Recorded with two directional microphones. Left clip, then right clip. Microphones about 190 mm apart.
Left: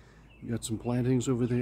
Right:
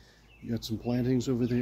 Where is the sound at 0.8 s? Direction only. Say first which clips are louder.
Even; 5° left (ahead or behind).